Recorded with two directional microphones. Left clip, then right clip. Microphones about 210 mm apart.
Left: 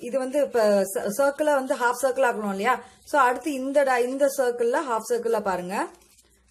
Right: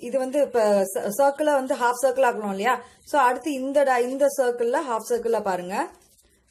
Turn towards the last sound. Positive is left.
turn(degrees=0)  # may be behind; listen again after turning